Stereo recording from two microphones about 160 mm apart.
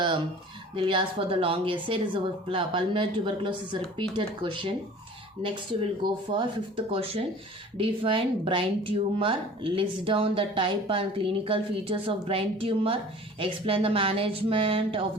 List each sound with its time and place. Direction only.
0.8 s speech: 30° right (ahead or behind)